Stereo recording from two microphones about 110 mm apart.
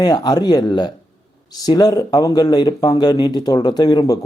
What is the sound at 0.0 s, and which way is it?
Speech, 40° left (ahead or behind).